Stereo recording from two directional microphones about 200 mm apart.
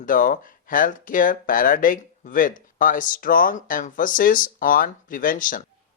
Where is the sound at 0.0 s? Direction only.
40° left (ahead or behind).